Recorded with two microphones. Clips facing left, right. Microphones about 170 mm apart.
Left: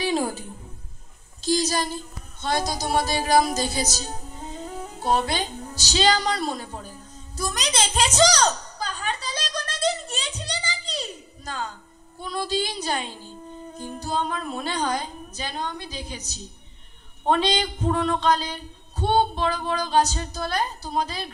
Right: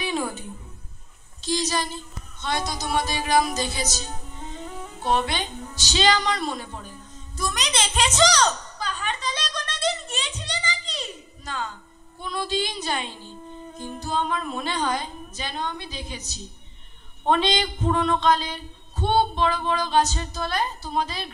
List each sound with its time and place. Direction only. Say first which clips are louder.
0.0 s music: left 3 dB; 35° left (ahead or behind)
1.4 s a man's voice: left 2 dB; 35° left (ahead or behind)
2.4 s music: left 2 dB; 35° left (ahead or behind)
12.2 s a woman's voice: left 1 dB; 40° left (ahead or behind)